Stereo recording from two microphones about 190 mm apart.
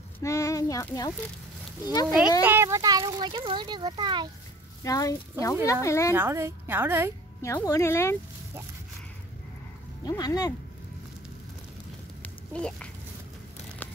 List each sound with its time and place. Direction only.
0.2 s speech: 15° left (ahead or behind)
2.4 s speech: 15° right (ahead or behind)
4.8 s speech: 20° left (ahead or behind)
6.1 s a woman's voice: 15° right (ahead or behind)
7.4 s speech: 15° left (ahead or behind)
10.0 s speech: 20° left (ahead or behind)
12.2 s a sound: 5° left (ahead or behind)